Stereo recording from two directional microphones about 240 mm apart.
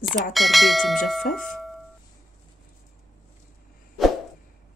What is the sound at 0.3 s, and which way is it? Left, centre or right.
Speech, centre.